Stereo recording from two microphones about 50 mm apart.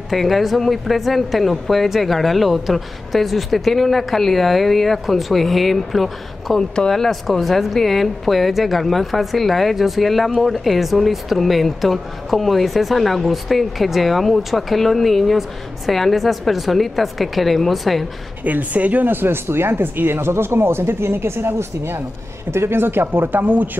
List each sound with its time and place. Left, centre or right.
0.1 s speech: centre
18.4 s speech: right
19.1 s speech: right